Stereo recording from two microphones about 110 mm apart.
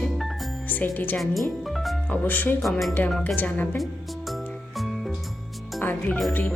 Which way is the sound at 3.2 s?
15° left (ahead or behind).